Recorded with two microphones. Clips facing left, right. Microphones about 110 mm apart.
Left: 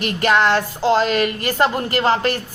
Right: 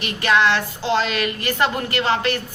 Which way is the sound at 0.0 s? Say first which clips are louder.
Left 2 dB; 45° left (ahead or behind).